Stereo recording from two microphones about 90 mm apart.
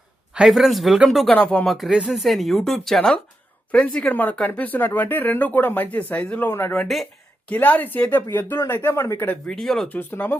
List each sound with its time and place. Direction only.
0.3 s speech: 5° right (ahead or behind)
1.3 s speech: 15° left (ahead or behind)
1.6 s speech: centre (ahead or behind); by 6.7 s 25° left (ahead or behind)
6.7 s speech: centre (ahead or behind)
7.5 s speech: 20° left (ahead or behind)
9.5 s speech: 5° left (ahead or behind)
9.9 s speech: 20° left (ahead or behind)